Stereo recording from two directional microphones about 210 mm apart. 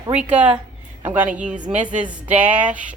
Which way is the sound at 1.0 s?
10° right (ahead or behind).